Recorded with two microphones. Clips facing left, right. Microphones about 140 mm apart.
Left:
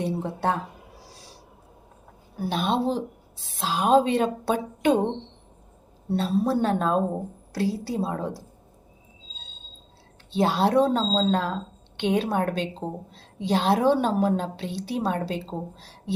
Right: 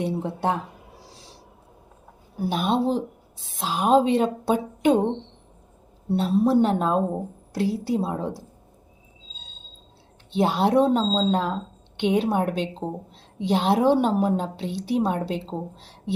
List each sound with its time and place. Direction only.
0.0 s a woman's voice: 15° right (ahead or behind)
2.4 s a woman's voice: 10° right (ahead or behind)
6.1 s a woman's voice: 15° right (ahead or behind)
10.3 s a woman's voice: 15° right (ahead or behind)